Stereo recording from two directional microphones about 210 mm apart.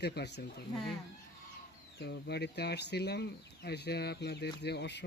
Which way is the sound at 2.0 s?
55° left (ahead or behind).